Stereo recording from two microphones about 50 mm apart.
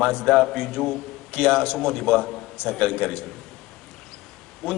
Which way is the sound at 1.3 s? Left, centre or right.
Left.